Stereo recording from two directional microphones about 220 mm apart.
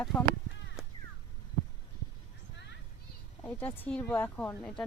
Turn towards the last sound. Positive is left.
turn(degrees=5)  # may be behind; listen again after turning